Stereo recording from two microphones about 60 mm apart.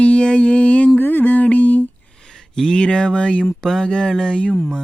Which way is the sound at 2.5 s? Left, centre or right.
Centre.